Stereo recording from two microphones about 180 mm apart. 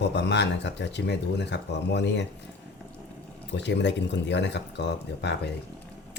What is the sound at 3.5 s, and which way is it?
Speech, 75° left (ahead or behind).